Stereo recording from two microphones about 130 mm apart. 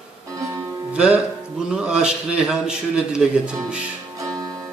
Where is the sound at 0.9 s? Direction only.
10° right (ahead or behind).